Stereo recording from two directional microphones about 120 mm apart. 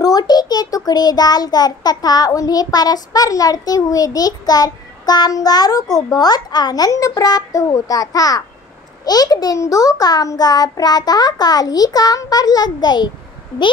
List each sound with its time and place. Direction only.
0.0 s a child's voice: 35° left (ahead or behind)